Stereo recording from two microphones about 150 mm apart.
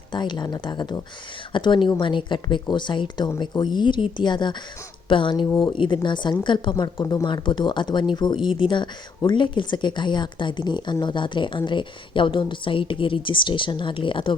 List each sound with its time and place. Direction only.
0.1 s a woman's voice: 30° left (ahead or behind)